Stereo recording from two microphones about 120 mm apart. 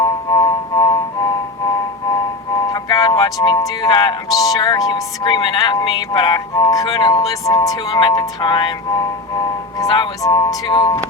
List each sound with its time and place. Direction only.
0.0 s music: 30° left (ahead or behind)
2.6 s speech: 30° left (ahead or behind)
9.0 s music: 30° left (ahead or behind)